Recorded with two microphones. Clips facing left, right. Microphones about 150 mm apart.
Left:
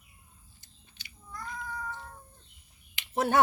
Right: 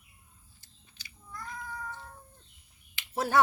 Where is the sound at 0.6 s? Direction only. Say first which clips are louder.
Even; 20° left (ahead or behind).